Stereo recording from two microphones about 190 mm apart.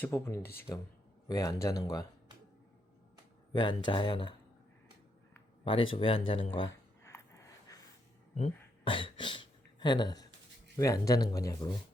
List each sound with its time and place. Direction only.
0.0 s speech: 15° left (ahead or behind)
3.5 s speech: 25° left (ahead or behind)
5.6 s speech: 30° left (ahead or behind)
7.0 s a sound: 15° left (ahead or behind)
8.8 s a sound: 25° left (ahead or behind)
10.8 s speech: 15° left (ahead or behind)